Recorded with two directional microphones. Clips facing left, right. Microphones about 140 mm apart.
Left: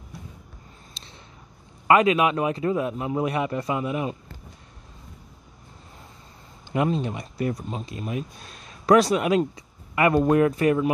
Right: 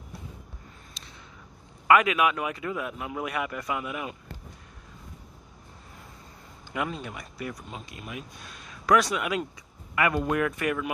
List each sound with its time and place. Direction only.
1.0 s a sound: 30° left (ahead or behind)
1.9 s a man's voice: 30° left (ahead or behind)
6.7 s speech: 30° left (ahead or behind)